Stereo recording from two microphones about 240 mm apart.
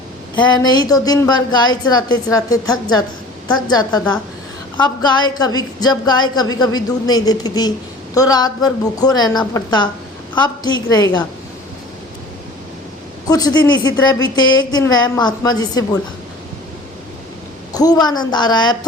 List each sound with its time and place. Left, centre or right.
0.3 s speech: centre
13.2 s speech: centre
17.7 s speech: centre